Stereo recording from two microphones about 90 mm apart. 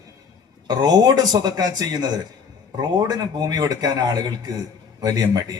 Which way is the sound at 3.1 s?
45° right (ahead or behind).